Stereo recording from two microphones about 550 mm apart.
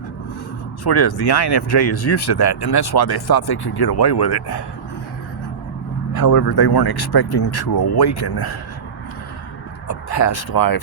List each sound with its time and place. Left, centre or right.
0.9 s speech: left
6.2 s speech: left
9.8 s speech: left